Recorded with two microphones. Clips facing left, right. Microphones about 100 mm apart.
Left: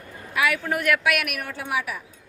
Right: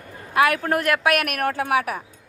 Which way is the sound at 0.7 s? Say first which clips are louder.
Right 3 dB; 35° right (ahead or behind).